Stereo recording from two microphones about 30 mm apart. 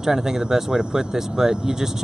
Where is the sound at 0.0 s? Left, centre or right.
Centre.